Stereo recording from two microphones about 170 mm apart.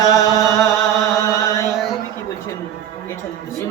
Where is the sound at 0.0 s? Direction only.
20° left (ahead or behind).